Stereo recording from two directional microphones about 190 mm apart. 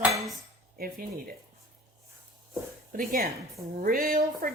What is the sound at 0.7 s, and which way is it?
Speech, 50° right (ahead or behind).